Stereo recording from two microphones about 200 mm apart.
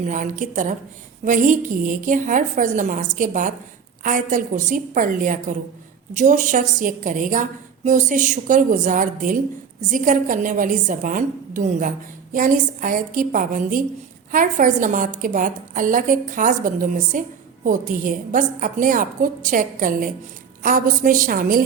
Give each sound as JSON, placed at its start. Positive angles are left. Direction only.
{"t": 0.0, "sound": "a woman's voice", "side_deg": -40}